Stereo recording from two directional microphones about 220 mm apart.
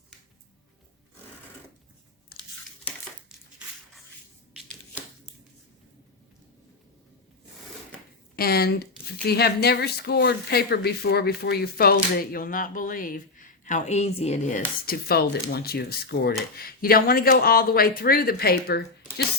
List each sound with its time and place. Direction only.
2.3 s tearing: 45° left (ahead or behind)
8.4 s speech: 45° left (ahead or behind)
14.8 s speech: 45° left (ahead or behind)